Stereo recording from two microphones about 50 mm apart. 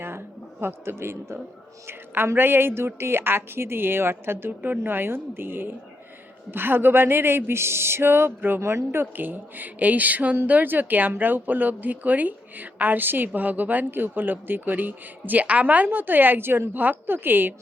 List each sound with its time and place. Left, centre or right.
0.6 s a man's voice: right